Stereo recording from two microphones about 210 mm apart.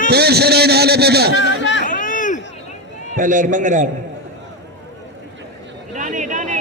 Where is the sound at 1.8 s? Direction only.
40° left (ahead or behind).